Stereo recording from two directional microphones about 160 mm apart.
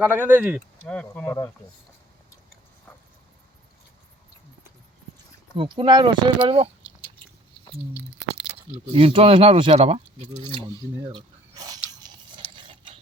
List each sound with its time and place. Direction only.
0.0 s speech: 10° right (ahead or behind)
0.9 s speech: 10° left (ahead or behind)
5.5 s speech: 30° right (ahead or behind)
8.5 s speech: 35° right (ahead or behind)
11.1 s a sound: 25° right (ahead or behind)